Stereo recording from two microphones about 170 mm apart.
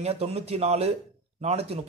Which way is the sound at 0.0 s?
40° right (ahead or behind).